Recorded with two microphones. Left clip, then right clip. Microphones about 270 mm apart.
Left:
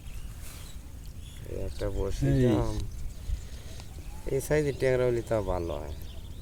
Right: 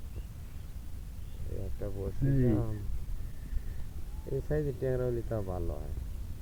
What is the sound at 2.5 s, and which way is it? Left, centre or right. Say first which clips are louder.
Speech: left 5 dB; left.